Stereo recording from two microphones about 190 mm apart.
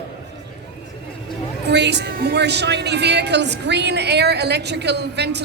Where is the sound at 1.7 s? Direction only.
65° right (ahead or behind).